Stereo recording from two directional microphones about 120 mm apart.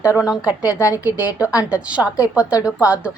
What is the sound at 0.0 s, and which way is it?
Speech, 25° left (ahead or behind).